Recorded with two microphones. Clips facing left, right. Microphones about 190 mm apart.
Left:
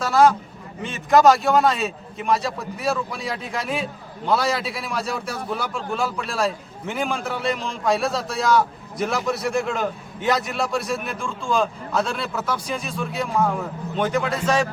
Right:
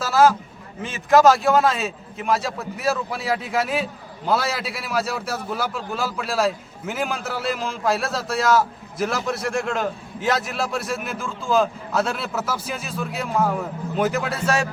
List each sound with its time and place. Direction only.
0.0 s a man's voice: 5° right (ahead or behind)